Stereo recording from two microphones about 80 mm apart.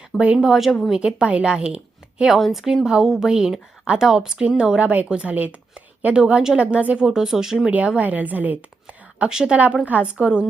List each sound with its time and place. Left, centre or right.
0.4 s speech: centre
7.7 s a woman's voice: centre